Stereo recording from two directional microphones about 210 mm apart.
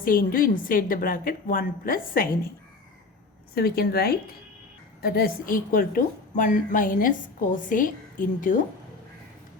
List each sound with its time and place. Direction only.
0.0 s a woman's voice: 40° left (ahead or behind)
3.5 s a woman's voice: 45° left (ahead or behind)